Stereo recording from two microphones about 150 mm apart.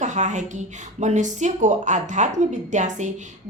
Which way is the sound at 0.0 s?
55° right (ahead or behind).